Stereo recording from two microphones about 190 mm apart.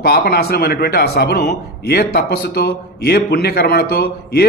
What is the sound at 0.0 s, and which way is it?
Speech, 55° left (ahead or behind).